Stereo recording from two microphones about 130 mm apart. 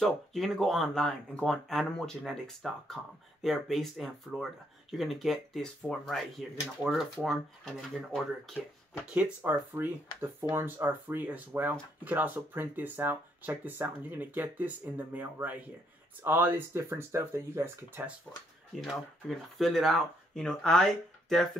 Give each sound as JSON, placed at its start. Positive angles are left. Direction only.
{"t": 0.0, "sound": "speech", "side_deg": 0}
{"t": 6.9, "sound": "speech", "side_deg": -10}
{"t": 7.2, "sound": "speech", "side_deg": 0}
{"t": 9.1, "sound": "speech", "side_deg": -10}
{"t": 18.8, "sound": "speech", "side_deg": 0}